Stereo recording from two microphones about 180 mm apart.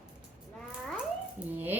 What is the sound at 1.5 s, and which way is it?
Speech, 10° right (ahead or behind).